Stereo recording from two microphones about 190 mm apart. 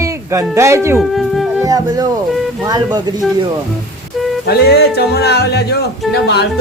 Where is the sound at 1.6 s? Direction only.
20° right (ahead or behind).